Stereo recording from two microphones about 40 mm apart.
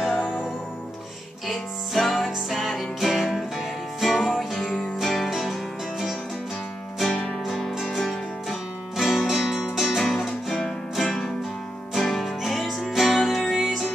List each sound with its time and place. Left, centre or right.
1.5 s music: centre
7.1 s music: left
7.4 s music: centre
11.1 s music: centre
11.9 s music: centre